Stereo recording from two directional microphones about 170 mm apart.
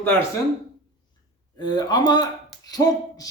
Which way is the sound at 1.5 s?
25° left (ahead or behind).